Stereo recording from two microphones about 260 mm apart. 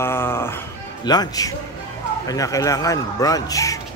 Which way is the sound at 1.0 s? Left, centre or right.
Centre.